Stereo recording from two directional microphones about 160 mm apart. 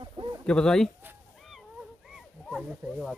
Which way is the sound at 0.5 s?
5° left (ahead or behind).